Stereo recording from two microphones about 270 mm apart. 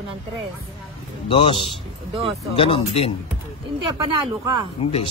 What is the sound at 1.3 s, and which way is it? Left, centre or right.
Speech, centre.